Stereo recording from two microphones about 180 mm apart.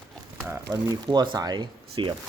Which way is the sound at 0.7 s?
20° right (ahead or behind).